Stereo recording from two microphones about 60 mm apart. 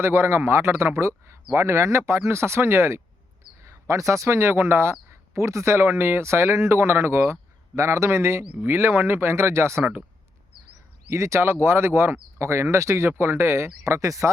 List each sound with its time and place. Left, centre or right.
0.0 s speech: right
3.6 s speech: right
11.1 s speech: right
13.8 s speech: right